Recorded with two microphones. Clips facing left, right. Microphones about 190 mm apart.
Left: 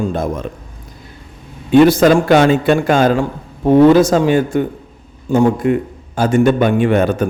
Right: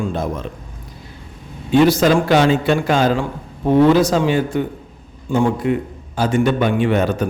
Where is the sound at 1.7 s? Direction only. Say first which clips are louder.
Left 4 dB; 55° left (ahead or behind).